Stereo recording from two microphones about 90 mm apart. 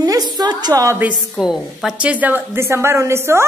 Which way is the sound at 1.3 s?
Centre (ahead or behind).